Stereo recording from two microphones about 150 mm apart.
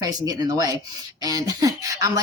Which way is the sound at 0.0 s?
25° right (ahead or behind).